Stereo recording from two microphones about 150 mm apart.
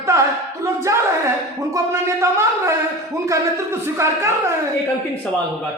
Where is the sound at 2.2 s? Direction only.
20° right (ahead or behind).